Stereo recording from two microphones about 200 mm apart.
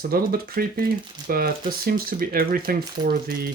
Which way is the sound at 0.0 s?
50° right (ahead or behind).